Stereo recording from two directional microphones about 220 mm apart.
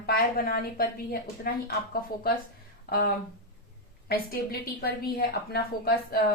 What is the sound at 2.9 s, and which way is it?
A woman's voice, 45° left (ahead or behind).